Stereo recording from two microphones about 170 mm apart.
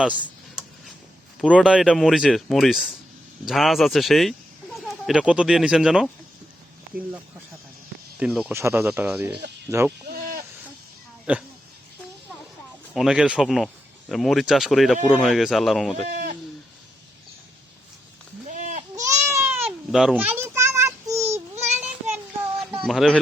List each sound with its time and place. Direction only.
0.0 s a sound: 5° right (ahead or behind)
1.4 s speech: 5° right (ahead or behind)
8.2 s speech: 5° right (ahead or behind)
11.3 s speech: 10° right (ahead or behind)
12.9 s speech: centre (ahead or behind)
16.1 s goat: 50° right (ahead or behind)
18.4 s a sound: 45° right (ahead or behind)
19.3 s a sound: 15° right (ahead or behind)
19.9 s child singing: centre (ahead or behind)
21.8 s child singing: 5° right (ahead or behind)
22.8 s speech: centre (ahead or behind)